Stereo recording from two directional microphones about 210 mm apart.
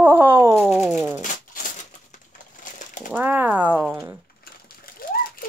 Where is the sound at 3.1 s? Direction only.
10° right (ahead or behind).